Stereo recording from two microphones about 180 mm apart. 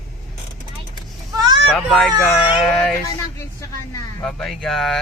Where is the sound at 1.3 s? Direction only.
25° right (ahead or behind).